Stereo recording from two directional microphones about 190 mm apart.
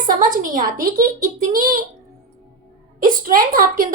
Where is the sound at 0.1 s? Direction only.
45° right (ahead or behind).